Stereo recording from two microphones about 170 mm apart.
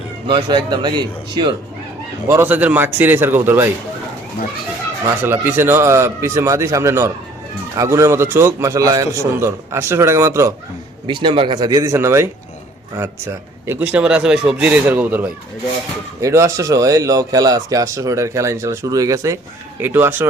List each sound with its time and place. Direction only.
0.3 s speech: 25° right (ahead or behind)
2.2 s a man's voice: 15° right (ahead or behind)
5.2 s a man's voice: 15° right (ahead or behind)
11.0 s a man's voice: 30° right (ahead or behind); by 20.2 s 15° right (ahead or behind)